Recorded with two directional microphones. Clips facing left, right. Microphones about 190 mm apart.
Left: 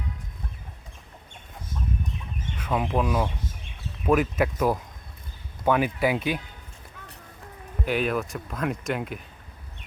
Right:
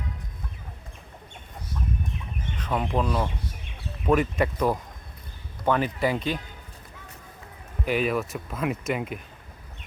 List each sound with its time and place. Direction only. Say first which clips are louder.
2.6 s speech: left 1 dB; 5° left (ahead or behind)
7.9 s speech: right 1 dB; centre (ahead or behind)